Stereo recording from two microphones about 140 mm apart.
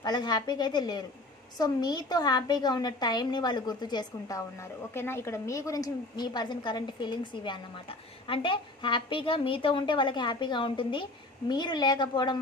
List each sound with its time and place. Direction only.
0.0 s a woman's voice: 30° left (ahead or behind)